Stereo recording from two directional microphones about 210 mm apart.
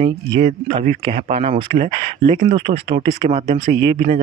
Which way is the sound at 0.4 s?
30° right (ahead or behind).